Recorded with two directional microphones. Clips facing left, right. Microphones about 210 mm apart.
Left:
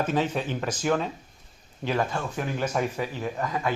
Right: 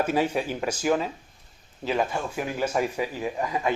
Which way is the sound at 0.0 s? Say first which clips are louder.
Right 2 dB; 10° right (ahead or behind).